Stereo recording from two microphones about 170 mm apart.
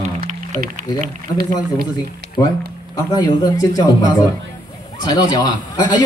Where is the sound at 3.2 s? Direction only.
20° left (ahead or behind).